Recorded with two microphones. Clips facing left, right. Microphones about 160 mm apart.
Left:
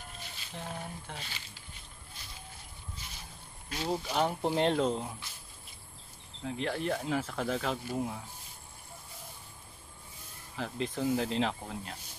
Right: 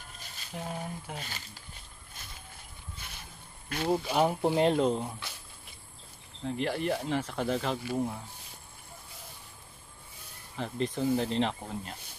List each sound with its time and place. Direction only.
0.5 s speech: 10° right (ahead or behind)
1.1 s speech: 45° right (ahead or behind)
3.0 s a sound: 60° right (ahead or behind)
3.9 s speech: 10° right (ahead or behind)
6.4 s speech: centre (ahead or behind)
10.5 s speech: centre (ahead or behind)